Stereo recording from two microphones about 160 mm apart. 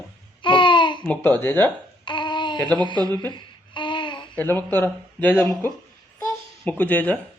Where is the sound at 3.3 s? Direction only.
30° left (ahead or behind).